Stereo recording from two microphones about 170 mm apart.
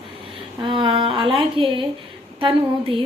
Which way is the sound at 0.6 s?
30° right (ahead or behind).